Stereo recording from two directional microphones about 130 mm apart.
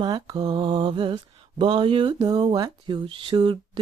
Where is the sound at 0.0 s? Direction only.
30° right (ahead or behind).